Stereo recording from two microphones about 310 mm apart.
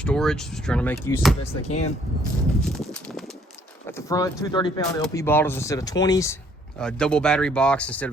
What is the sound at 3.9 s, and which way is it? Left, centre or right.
Speech, centre.